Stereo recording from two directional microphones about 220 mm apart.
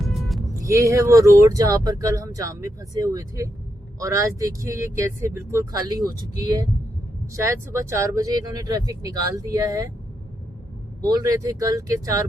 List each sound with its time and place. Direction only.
0.1 s music: centre (ahead or behind)
0.6 s speech: 15° right (ahead or behind)
11.0 s speech: 15° right (ahead or behind)